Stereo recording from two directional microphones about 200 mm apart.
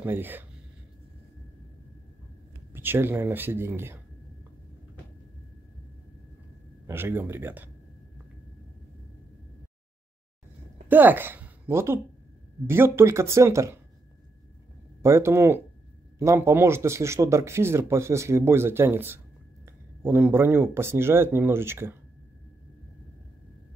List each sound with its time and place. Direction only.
0.0 s speech: 10° right (ahead or behind)
2.7 s speech: 10° right (ahead or behind)
6.9 s speech: 10° right (ahead or behind)
10.9 s a woman's voice: 10° right (ahead or behind)
15.0 s speech: 15° right (ahead or behind)